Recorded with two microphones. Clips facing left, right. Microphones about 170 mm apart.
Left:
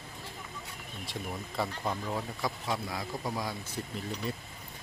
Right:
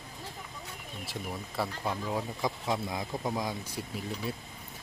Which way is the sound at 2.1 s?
20° right (ahead or behind).